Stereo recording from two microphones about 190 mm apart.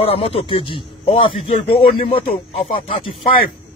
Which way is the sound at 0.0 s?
30° left (ahead or behind).